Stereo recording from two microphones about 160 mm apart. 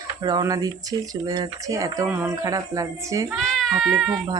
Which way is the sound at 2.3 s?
20° right (ahead or behind).